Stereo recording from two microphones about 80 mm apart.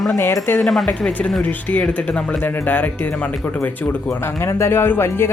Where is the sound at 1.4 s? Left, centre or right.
Centre.